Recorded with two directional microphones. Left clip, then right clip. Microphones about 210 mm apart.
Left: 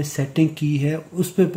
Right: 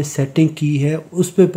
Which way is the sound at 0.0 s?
30° right (ahead or behind).